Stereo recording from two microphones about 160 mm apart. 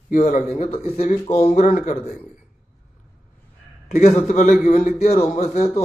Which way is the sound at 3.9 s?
45° left (ahead or behind).